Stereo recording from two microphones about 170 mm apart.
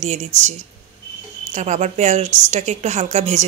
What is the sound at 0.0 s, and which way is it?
A woman's voice, 45° right (ahead or behind).